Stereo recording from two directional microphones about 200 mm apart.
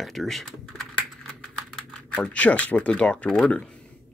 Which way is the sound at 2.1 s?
5° left (ahead or behind).